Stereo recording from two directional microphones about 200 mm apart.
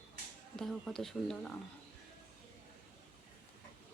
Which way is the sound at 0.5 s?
Centre (ahead or behind).